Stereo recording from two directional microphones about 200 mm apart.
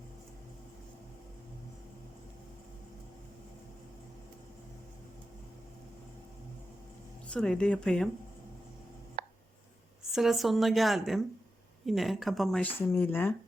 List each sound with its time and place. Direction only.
7.3 s speech: 5° left (ahead or behind)
9.2 s a sound: 45° right (ahead or behind)
10.0 s speech: centre (ahead or behind)